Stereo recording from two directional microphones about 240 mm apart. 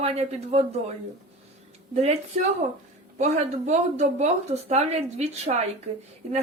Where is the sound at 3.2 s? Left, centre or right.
Right.